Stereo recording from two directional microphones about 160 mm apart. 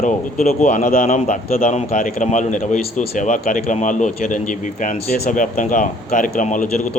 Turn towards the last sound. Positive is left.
turn(degrees=50)  # may be behind; listen again after turning